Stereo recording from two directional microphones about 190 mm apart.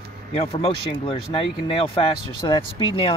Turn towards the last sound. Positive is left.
turn(degrees=30)  # may be behind; listen again after turning